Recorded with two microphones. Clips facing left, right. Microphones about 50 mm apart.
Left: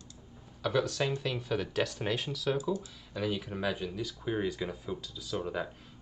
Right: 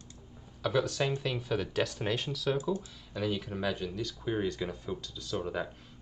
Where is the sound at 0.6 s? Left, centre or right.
Centre.